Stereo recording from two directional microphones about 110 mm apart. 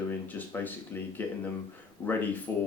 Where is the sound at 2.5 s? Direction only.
20° left (ahead or behind).